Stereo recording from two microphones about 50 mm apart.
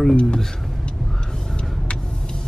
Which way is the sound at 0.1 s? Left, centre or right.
Centre.